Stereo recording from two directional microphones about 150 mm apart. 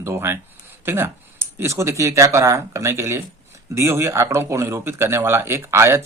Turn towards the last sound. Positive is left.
turn(degrees=-15)  # may be behind; listen again after turning